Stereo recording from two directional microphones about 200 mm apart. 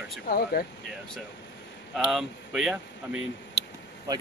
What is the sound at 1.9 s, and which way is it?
Speech, centre (ahead or behind).